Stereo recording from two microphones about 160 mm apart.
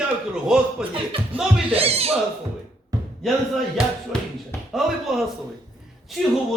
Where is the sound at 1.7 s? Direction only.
40° right (ahead or behind).